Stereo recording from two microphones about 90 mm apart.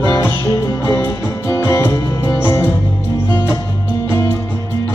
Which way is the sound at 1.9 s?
45° left (ahead or behind).